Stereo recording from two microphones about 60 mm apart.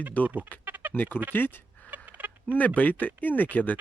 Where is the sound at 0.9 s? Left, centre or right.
Left.